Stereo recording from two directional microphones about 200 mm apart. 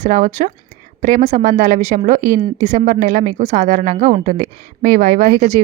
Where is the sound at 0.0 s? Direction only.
40° right (ahead or behind).